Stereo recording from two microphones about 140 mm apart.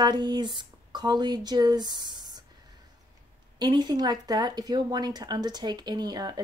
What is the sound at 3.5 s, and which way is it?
Speech, 30° right (ahead or behind).